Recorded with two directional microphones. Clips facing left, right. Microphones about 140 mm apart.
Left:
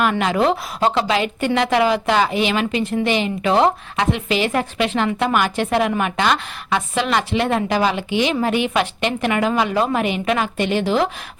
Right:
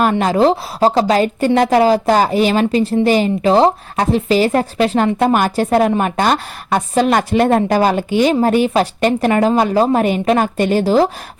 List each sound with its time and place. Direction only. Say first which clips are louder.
0.0 s a woman's voice: right 5 dB; 40° right (ahead or behind)